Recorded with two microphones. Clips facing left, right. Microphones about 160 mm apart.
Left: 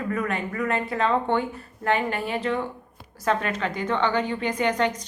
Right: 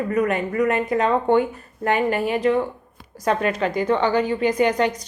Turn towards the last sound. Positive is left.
turn(degrees=-10)  # may be behind; listen again after turning